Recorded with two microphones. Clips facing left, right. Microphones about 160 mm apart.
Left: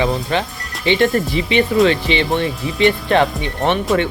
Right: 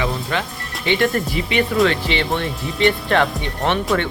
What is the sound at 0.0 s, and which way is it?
Music, 25° left (ahead or behind).